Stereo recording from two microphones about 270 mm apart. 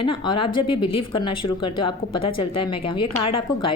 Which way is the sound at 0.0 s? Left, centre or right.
Centre.